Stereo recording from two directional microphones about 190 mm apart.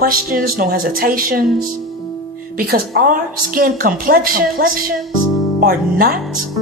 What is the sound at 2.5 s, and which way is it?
A woman's voice, 50° right (ahead or behind).